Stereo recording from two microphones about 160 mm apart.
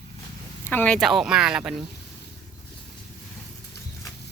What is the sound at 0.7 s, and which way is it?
Speech, 10° left (ahead or behind).